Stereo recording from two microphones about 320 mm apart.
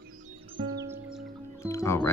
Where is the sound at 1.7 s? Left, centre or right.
Centre.